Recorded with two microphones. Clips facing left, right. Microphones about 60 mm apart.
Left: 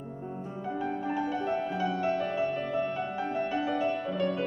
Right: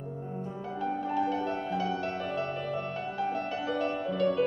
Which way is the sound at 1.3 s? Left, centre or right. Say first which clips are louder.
Left 1 dB; centre.